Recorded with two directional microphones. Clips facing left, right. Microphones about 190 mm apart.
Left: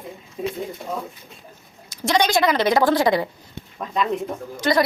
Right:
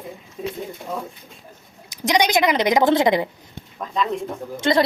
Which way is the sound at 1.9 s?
15° right (ahead or behind).